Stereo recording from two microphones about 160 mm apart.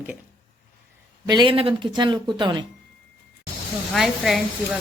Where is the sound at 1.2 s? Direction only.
25° right (ahead or behind).